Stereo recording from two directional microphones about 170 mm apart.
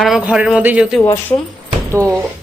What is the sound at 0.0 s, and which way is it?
A woman's voice, 5° right (ahead or behind).